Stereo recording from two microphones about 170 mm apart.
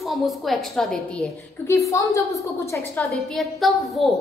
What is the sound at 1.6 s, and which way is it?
A woman's voice, 20° left (ahead or behind).